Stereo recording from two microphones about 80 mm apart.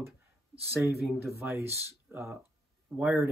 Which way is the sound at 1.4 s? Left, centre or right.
Right.